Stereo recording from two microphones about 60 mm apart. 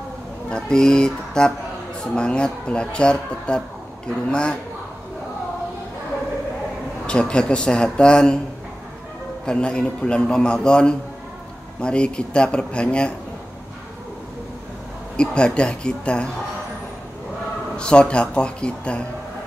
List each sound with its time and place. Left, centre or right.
0.5 s a man's voice: centre
7.1 s a man's voice: centre
9.5 s a man's voice: centre
15.1 s a man's voice: centre
17.7 s a man's voice: centre